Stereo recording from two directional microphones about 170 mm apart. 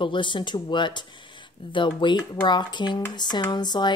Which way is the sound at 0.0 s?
30° left (ahead or behind).